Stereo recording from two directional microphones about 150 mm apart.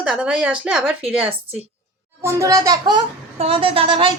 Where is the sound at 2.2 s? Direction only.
20° right (ahead or behind).